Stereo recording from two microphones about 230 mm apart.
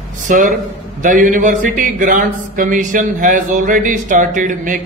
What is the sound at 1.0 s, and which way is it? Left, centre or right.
Speech, right.